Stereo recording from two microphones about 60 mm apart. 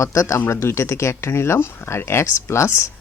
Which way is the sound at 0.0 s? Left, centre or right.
Left.